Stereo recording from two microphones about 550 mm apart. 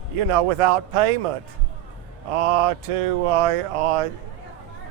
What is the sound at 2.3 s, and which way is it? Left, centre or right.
A man's voice, right.